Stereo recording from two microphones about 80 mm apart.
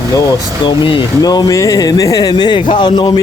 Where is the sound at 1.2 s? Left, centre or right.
Left.